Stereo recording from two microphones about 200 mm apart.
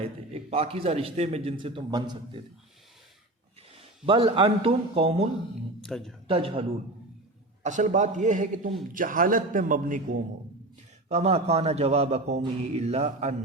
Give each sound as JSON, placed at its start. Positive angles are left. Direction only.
{"t": 0.0, "sound": "a man's voice", "side_deg": -30}
{"t": 3.8, "sound": "speech", "side_deg": -25}
{"t": 5.8, "sound": "speech", "side_deg": 0}
{"t": 6.2, "sound": "a man's voice", "side_deg": -25}